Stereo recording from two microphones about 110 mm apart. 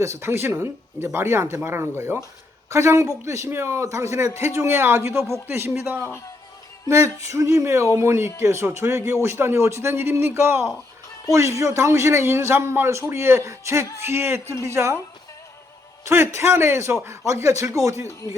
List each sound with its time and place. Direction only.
0.0 s a man's voice: 25° right (ahead or behind)
16.0 s a man's voice: 25° right (ahead or behind)